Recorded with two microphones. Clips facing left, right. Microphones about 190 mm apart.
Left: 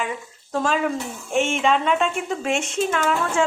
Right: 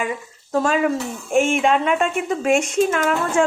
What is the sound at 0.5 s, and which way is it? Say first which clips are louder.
A woman's voice: right 4 dB; 5° right (ahead or behind).